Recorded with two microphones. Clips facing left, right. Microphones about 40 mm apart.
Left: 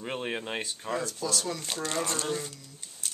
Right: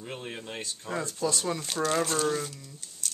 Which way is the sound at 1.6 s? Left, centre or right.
Centre.